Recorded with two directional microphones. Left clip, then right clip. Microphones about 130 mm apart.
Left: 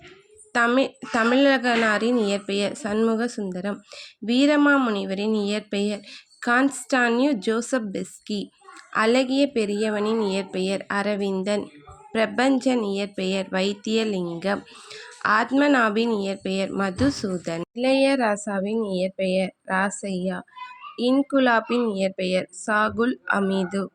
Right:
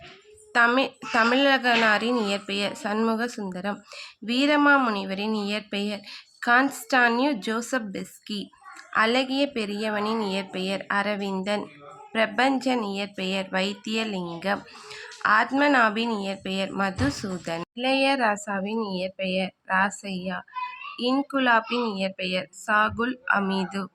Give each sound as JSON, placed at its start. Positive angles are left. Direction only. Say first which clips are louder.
{"t": 0.8, "sound": "a child's voice", "louder": "even", "side_deg": 35}